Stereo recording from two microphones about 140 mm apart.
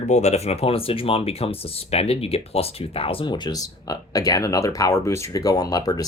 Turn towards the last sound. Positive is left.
turn(degrees=25)  # may be behind; listen again after turning